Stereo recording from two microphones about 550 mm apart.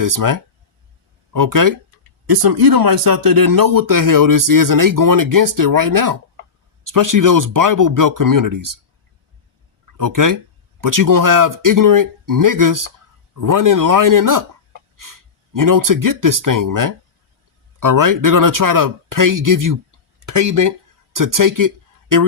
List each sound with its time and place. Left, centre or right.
0.0 s speech: right
10.0 s speech: right
15.5 s speech: right